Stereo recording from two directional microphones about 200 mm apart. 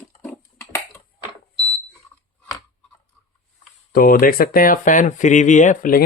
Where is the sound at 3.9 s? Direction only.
45° left (ahead or behind).